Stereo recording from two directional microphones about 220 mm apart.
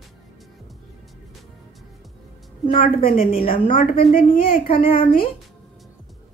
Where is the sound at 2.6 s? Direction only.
25° left (ahead or behind).